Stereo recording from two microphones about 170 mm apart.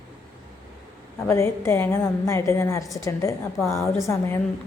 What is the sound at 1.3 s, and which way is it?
A woman's voice, 15° left (ahead or behind).